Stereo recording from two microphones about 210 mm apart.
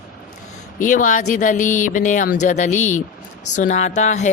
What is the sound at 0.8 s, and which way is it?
Speech, 40° left (ahead or behind).